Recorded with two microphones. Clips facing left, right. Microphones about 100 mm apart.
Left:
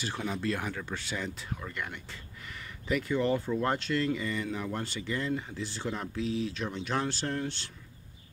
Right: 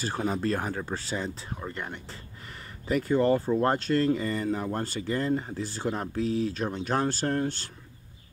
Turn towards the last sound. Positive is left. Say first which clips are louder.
# right 6 dB
turn(degrees=-45)  # may be behind; listen again after turning